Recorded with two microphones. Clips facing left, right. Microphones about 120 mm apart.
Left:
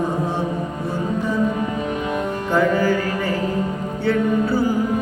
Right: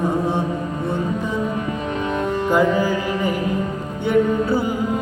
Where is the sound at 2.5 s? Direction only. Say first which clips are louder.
Even; 15° right (ahead or behind).